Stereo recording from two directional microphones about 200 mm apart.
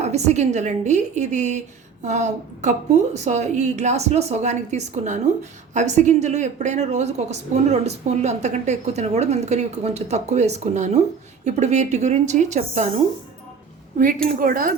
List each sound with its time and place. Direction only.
0.0 s a woman's voice: 35° right (ahead or behind)
14.0 s speech: 45° right (ahead or behind)